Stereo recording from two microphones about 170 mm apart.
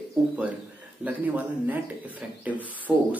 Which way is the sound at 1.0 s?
10° right (ahead or behind).